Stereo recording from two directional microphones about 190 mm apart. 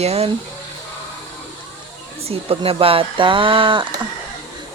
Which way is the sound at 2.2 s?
30° right (ahead or behind).